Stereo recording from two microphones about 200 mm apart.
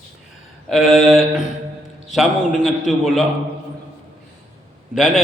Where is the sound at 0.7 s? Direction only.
Centre (ahead or behind).